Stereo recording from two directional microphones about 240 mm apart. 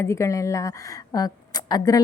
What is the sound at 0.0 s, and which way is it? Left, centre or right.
A woman's voice, centre.